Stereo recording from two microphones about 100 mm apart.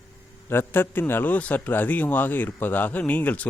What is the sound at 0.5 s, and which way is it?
A man's voice, 20° left (ahead or behind).